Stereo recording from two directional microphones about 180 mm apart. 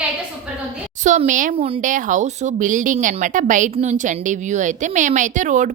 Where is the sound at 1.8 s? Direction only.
45° right (ahead or behind).